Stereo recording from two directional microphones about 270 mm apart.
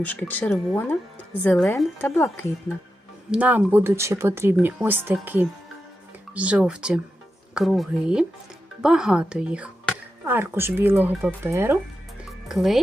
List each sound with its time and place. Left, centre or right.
0.0 s speech: centre
3.3 s speech: centre